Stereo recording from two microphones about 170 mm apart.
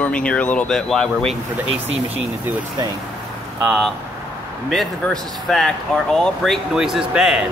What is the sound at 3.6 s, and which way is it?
Speech, centre (ahead or behind).